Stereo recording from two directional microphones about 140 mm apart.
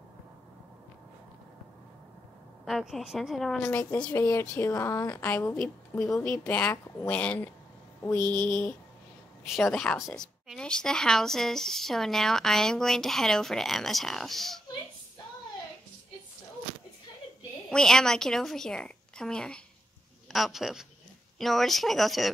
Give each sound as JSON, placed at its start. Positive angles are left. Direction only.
{"t": 2.6, "sound": "a woman's voice", "side_deg": 0}
{"t": 3.6, "sound": "a woman's voice", "side_deg": 15}
{"t": 5.3, "sound": "a woman's voice", "side_deg": 10}
{"t": 17.6, "sound": "a woman's voice", "side_deg": 5}